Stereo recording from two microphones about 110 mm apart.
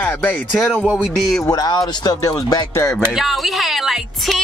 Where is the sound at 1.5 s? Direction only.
40° left (ahead or behind).